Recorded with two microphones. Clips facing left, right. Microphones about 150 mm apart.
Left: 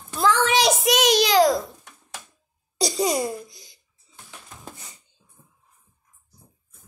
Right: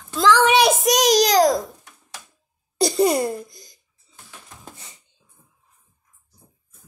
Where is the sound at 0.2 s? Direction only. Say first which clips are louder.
Right 4 dB; 75° right (ahead or behind); by 1.6 s 40° right (ahead or behind).